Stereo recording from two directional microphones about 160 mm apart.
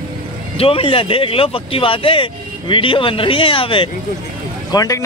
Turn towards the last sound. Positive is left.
turn(degrees=20)  # may be behind; listen again after turning